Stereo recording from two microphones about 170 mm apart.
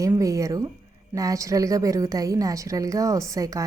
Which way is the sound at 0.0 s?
20° right (ahead or behind).